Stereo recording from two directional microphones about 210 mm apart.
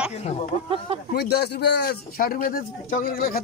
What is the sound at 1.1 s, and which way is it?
A man's voice, 50° left (ahead or behind).